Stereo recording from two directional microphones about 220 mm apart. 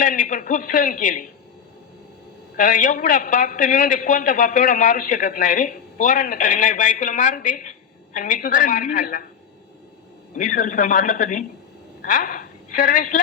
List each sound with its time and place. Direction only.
0.0 s a woman's voice: 35° left (ahead or behind)
2.6 s a woman's voice: 35° left (ahead or behind)
10.3 s a woman's voice: 35° left (ahead or behind)